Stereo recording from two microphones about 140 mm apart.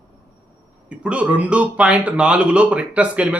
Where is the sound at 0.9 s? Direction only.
10° right (ahead or behind).